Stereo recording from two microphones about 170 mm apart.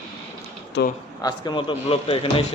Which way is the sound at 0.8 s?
90° left.